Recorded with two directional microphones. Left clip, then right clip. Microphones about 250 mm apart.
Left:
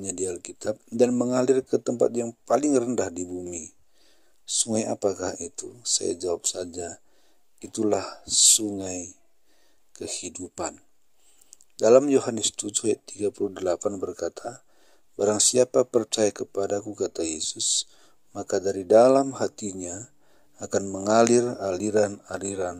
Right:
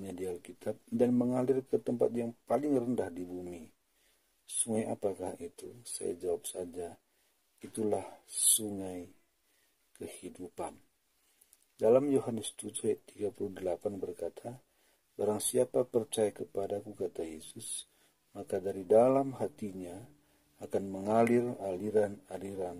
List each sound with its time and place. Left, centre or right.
0.0 s speech: left
4.6 s speech: left
11.8 s speech: left